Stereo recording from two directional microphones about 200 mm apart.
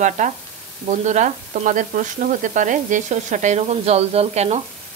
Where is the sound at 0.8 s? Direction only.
35° right (ahead or behind).